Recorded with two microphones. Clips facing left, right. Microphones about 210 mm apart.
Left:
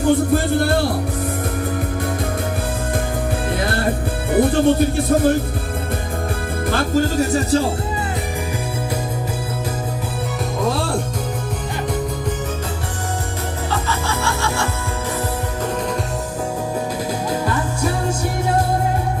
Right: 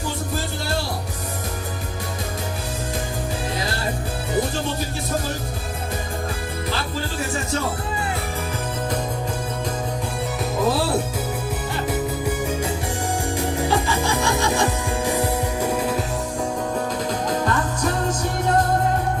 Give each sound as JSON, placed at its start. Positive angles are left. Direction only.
{"t": 0.0, "sound": "speech", "side_deg": 55}
{"t": 3.6, "sound": "music", "side_deg": 55}
{"t": 6.7, "sound": "speech", "side_deg": 50}
{"t": 10.6, "sound": "speech", "side_deg": -5}
{"t": 13.7, "sound": "music", "side_deg": -15}
{"t": 17.4, "sound": "music", "side_deg": 10}